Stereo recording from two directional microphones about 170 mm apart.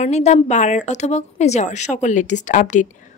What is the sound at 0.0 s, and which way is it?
A woman's voice, 40° left (ahead or behind).